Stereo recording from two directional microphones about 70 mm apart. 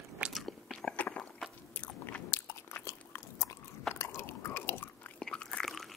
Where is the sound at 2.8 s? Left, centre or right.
Left.